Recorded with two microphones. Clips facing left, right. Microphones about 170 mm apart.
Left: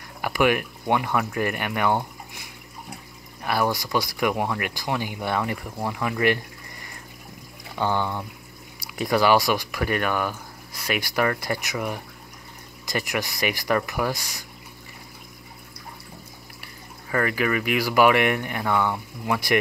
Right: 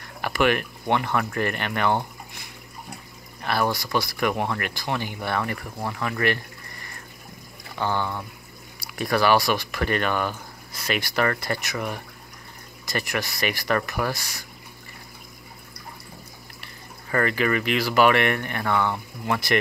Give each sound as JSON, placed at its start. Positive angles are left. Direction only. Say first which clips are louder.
{"t": 0.2, "sound": "speech", "louder": "left 1 dB", "side_deg": 10}
{"t": 3.4, "sound": "speech", "louder": "left 1 dB", "side_deg": 15}
{"t": 7.7, "sound": "speech", "louder": "left 2 dB", "side_deg": 15}
{"t": 16.6, "sound": "speech", "louder": "even", "side_deg": 10}